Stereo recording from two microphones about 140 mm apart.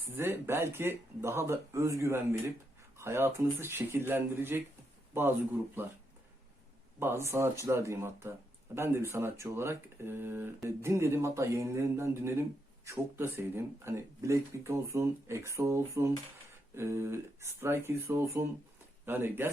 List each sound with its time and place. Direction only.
0.2 s speech: 15° right (ahead or behind)
7.0 s speech: 20° right (ahead or behind)